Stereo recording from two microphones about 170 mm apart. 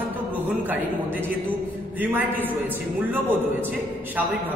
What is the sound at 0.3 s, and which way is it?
A man's voice, 10° right (ahead or behind).